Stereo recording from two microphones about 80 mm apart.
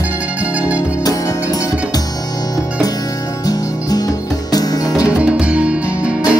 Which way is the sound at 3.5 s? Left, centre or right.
Left.